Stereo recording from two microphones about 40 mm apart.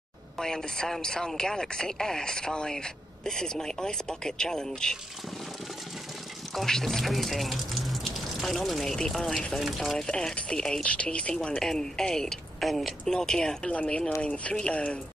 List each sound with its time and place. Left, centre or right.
0.4 s speech: centre
6.5 s speech: centre
10.0 s speech: centre
10.9 s a woman's voice: left
11.6 s speech: centre
13.1 s speech: centre
13.7 s a woman's voice: left